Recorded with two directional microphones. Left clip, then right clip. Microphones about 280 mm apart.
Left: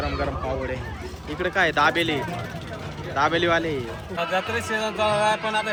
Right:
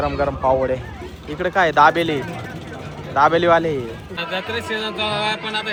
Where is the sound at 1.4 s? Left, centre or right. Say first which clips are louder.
Right 6 dB; centre.